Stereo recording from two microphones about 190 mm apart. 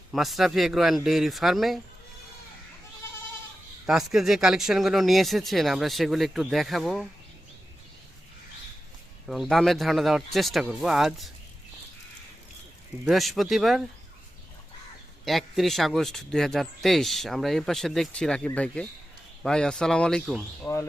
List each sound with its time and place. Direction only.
0.1 s speech: centre (ahead or behind)
3.8 s speech: centre (ahead or behind)
9.2 s speech: centre (ahead or behind)
13.1 s speech: centre (ahead or behind)
15.2 s speech: centre (ahead or behind)
20.7 s speech: 20° left (ahead or behind)